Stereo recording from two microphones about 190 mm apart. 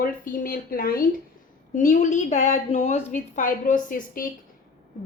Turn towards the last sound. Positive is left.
turn(degrees=45)  # may be behind; listen again after turning